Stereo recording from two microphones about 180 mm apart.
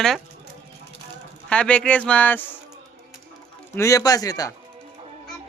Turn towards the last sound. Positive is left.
turn(degrees=20)  # may be behind; listen again after turning